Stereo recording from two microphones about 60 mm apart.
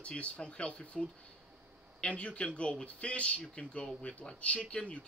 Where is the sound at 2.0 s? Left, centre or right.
Centre.